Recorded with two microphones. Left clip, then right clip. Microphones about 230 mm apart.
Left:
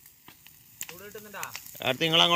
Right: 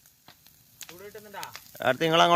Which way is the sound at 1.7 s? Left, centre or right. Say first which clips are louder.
Right 1 dB; centre.